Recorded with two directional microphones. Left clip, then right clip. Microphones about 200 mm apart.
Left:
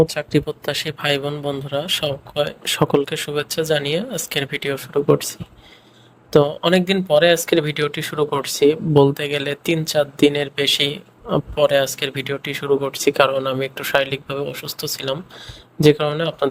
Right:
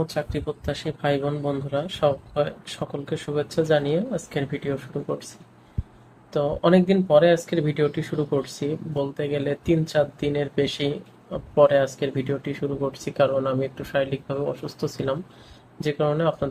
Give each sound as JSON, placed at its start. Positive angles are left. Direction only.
{"t": 0.0, "sound": "speech", "side_deg": 45}
{"t": 6.3, "sound": "speech", "side_deg": 55}